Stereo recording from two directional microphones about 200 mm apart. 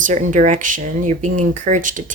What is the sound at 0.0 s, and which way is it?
Speech, 40° right (ahead or behind).